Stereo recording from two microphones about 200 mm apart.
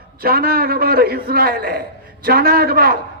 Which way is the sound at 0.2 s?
50° right (ahead or behind).